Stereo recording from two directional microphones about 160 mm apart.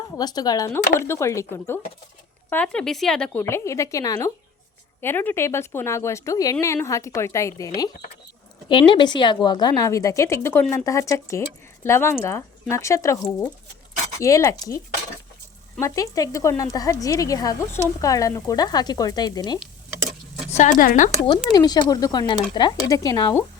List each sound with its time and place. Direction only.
0.2 s a woman's voice: 25° left (ahead or behind); by 3.2 s 5° left (ahead or behind)
3.3 s a woman's voice: 15° left (ahead or behind)
8.9 s a woman's voice: 30° left (ahead or behind)
15.8 s a woman's voice: 20° left (ahead or behind)
20.5 s speech: 50° left (ahead or behind)
21.5 s a woman's voice: 25° left (ahead or behind)